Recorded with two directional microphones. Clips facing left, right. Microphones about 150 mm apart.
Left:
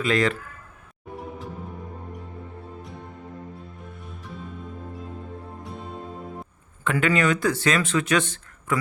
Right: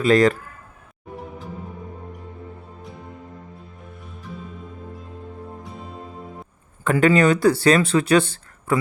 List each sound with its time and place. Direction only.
0.0 s speech: 40° right (ahead or behind)
5.6 s music: centre (ahead or behind)
6.8 s speech: 35° right (ahead or behind)